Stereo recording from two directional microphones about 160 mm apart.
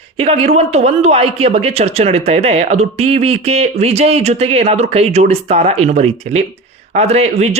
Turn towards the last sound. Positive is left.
turn(degrees=-40)  # may be behind; listen again after turning